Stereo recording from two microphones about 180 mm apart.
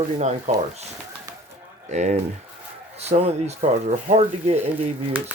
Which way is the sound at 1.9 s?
40° right (ahead or behind).